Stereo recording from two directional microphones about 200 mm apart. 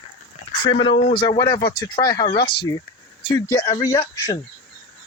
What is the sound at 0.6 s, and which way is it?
Speech, 25° left (ahead or behind).